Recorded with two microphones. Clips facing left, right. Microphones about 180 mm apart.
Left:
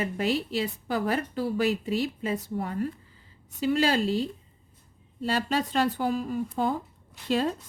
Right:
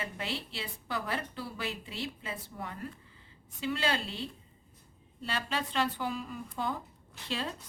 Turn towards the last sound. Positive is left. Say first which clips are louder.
# left 11 dB
turn(degrees=45)  # may be behind; listen again after turning